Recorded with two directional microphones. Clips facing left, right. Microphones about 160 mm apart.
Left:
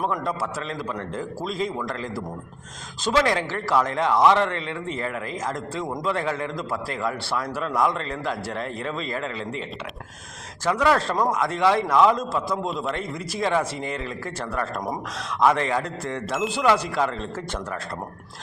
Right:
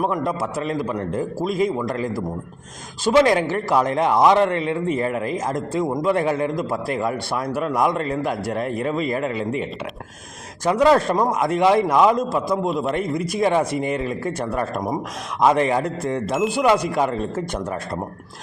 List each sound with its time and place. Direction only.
0.3 s a man's voice: 15° right (ahead or behind)
10.7 s a man's voice: 20° right (ahead or behind)